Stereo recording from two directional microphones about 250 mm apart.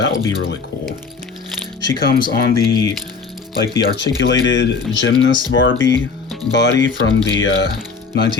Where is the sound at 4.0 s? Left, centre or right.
Left.